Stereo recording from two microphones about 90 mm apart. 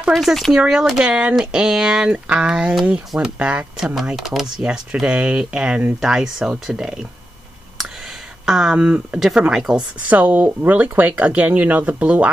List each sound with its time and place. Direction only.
0.1 s speech: centre (ahead or behind)
8.5 s speech: 5° right (ahead or behind)